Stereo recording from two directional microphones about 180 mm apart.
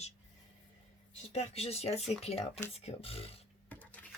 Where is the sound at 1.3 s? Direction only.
35° left (ahead or behind).